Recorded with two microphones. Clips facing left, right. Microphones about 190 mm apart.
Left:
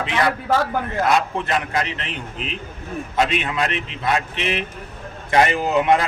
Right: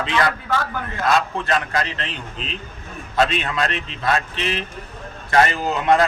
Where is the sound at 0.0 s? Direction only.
20° left (ahead or behind).